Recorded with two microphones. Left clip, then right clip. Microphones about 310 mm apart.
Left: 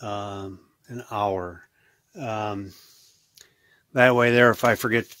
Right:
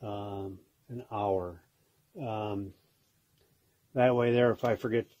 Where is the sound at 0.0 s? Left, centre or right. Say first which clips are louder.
Left 7 dB; left.